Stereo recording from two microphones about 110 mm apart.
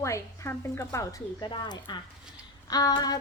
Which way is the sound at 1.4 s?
45° left (ahead or behind).